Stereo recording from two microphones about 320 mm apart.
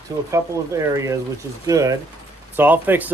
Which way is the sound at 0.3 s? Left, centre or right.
Centre.